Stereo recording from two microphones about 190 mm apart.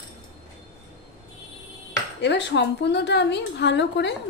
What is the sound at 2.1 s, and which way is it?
A woman's voice, 70° left (ahead or behind).